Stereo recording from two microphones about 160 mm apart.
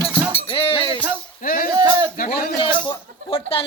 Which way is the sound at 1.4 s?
60° left (ahead or behind).